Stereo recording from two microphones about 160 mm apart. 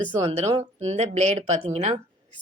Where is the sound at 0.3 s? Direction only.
40° right (ahead or behind).